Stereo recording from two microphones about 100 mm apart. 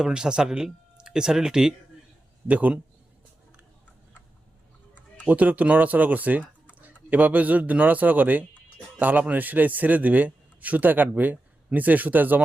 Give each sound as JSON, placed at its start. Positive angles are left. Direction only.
{"t": 0.0, "sound": "a man's voice", "side_deg": -10}
{"t": 5.3, "sound": "a man's voice", "side_deg": -15}